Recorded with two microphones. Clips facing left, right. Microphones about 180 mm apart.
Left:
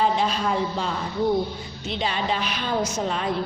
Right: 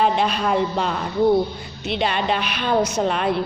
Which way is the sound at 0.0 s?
65° right (ahead or behind).